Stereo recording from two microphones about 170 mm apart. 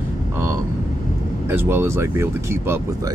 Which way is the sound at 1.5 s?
15° right (ahead or behind).